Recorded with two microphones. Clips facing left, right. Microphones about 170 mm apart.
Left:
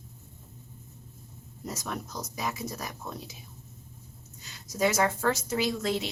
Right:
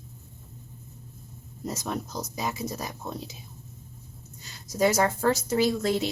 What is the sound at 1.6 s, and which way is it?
Speech, 25° right (ahead or behind).